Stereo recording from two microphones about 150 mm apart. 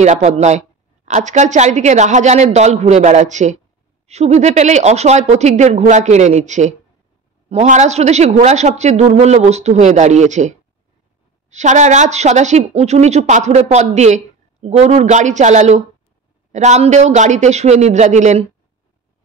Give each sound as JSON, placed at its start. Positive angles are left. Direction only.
{"t": 0.0, "sound": "a woman's voice", "side_deg": -50}